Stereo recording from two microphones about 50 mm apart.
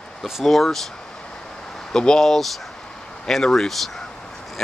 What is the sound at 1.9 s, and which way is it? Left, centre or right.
Speech, centre.